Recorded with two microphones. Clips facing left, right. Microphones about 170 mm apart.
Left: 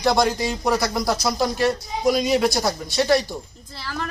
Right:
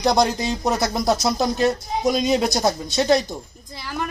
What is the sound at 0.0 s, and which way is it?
Speech, 20° right (ahead or behind).